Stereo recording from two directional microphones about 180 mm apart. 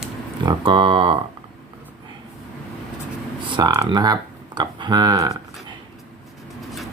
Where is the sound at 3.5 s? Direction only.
25° right (ahead or behind).